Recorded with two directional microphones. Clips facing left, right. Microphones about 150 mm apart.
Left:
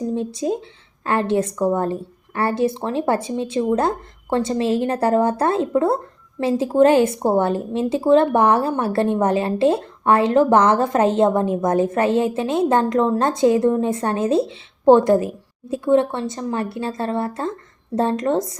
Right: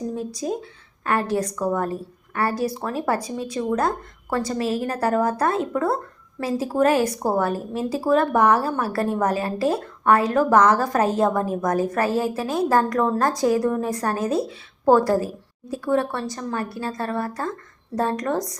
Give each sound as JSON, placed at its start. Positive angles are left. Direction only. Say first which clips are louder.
{"t": 0.1, "sound": "speech", "louder": "left 5 dB", "side_deg": 25}